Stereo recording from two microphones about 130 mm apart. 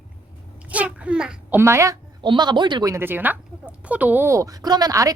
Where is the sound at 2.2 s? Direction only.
35° right (ahead or behind).